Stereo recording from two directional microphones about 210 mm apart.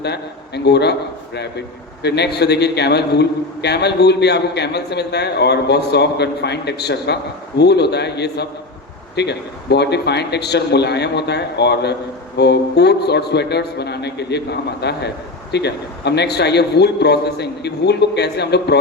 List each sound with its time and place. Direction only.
0.0 s a man's voice: 55° left (ahead or behind)